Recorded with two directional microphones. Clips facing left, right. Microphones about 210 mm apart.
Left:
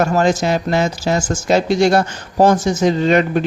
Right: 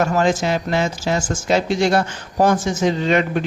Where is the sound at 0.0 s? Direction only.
40° left (ahead or behind).